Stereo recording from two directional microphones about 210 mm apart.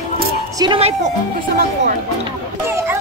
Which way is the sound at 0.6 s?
25° right (ahead or behind).